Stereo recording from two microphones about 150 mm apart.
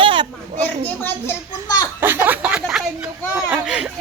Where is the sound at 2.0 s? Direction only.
15° right (ahead or behind).